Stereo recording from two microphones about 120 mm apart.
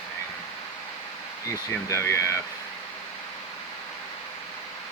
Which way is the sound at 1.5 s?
25° left (ahead or behind).